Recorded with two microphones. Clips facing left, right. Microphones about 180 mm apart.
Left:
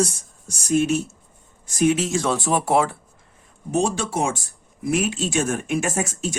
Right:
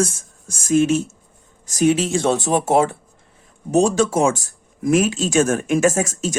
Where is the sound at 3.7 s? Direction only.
45° right (ahead or behind).